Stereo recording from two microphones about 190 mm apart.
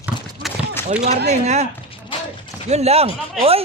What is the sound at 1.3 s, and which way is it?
Speech, 35° right (ahead or behind).